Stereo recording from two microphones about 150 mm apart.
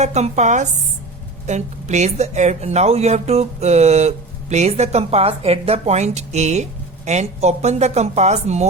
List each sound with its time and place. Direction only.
0.0 s speech: 50° right (ahead or behind)